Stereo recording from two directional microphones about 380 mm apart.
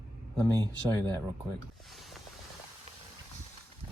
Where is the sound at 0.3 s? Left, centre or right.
Centre.